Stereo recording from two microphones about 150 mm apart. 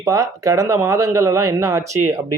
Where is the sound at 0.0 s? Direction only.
20° right (ahead or behind).